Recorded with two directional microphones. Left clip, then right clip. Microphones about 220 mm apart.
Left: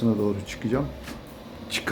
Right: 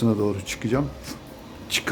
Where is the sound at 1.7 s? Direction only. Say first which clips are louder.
Right 4 dB; 10° right (ahead or behind).